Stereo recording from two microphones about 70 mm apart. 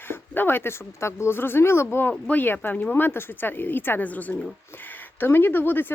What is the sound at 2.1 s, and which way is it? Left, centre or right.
Speech, left.